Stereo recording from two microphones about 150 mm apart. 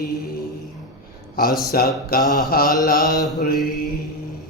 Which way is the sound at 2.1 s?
85° left.